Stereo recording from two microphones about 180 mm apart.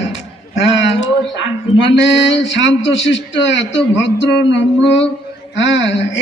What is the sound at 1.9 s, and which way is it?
A man's voice, 85° left.